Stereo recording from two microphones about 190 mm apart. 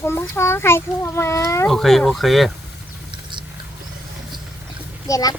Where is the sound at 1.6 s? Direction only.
Centre (ahead or behind).